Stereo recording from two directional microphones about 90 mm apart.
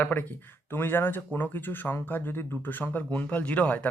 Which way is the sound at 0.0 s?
20° left (ahead or behind).